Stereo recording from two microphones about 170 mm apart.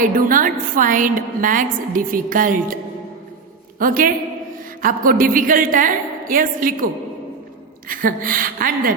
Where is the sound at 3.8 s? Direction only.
55° right (ahead or behind).